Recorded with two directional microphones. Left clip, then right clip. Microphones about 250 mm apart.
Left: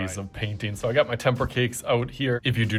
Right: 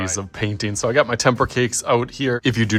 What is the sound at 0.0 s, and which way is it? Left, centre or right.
Speech, centre.